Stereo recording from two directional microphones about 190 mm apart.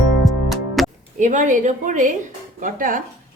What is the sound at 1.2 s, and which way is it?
A woman's voice, 40° right (ahead or behind).